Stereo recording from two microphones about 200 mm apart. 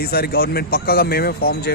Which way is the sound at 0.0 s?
50° left (ahead or behind).